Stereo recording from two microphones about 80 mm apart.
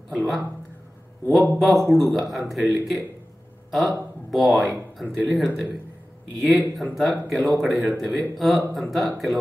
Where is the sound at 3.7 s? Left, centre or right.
Centre.